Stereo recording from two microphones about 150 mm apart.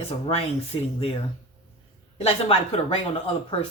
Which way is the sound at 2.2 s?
40° left (ahead or behind).